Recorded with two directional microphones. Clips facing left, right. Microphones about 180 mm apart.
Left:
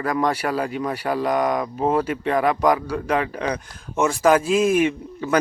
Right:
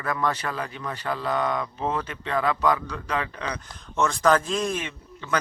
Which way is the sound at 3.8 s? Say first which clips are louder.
Left 4 dB; 10° left (ahead or behind).